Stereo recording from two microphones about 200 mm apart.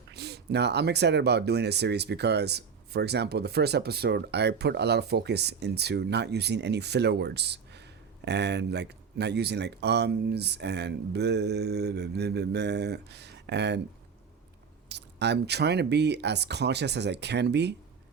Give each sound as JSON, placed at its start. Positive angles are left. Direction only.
{"t": 0.1, "sound": "speech", "side_deg": -55}
{"t": 14.8, "sound": "speech", "side_deg": -60}